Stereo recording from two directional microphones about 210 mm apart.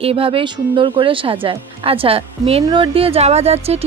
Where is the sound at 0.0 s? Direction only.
25° right (ahead or behind).